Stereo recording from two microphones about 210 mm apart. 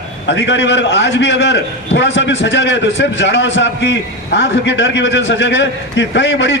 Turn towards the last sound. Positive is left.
turn(degrees=60)  # may be behind; listen again after turning